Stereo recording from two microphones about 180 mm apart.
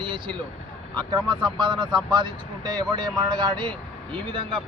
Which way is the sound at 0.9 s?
25° right (ahead or behind).